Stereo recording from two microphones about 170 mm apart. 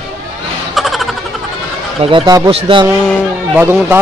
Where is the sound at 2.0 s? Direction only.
30° right (ahead or behind).